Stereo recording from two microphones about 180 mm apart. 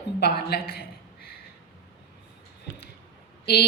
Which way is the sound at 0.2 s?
60° left (ahead or behind).